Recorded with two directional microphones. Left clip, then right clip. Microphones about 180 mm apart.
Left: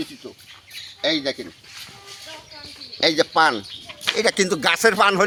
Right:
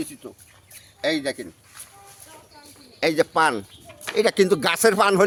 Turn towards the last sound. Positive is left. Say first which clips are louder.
# left 1 dB
turn(degrees=-60)  # may be behind; listen again after turning